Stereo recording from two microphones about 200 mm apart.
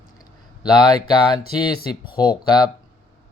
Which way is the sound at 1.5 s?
20° left (ahead or behind).